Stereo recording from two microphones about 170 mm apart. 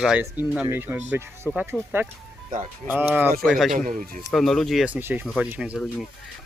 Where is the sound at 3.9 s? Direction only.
55° right (ahead or behind).